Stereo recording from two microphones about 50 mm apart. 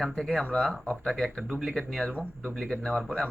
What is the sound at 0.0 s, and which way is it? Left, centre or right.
Speech, centre.